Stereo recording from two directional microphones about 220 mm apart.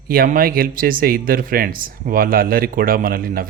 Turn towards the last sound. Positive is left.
turn(degrees=-40)  # may be behind; listen again after turning